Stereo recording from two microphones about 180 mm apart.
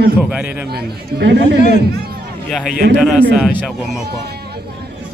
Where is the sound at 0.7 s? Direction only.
65° right (ahead or behind).